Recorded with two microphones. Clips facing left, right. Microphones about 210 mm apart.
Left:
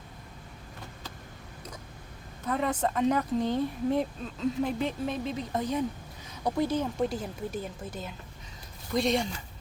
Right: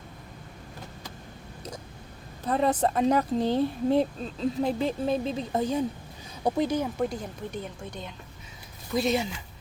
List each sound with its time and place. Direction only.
2.4 s speech: 35° right (ahead or behind)
6.4 s speech: 15° right (ahead or behind)
7.1 s a woman's voice: 5° left (ahead or behind)